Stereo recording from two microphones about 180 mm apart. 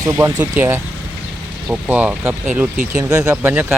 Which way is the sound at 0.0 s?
20° right (ahead or behind).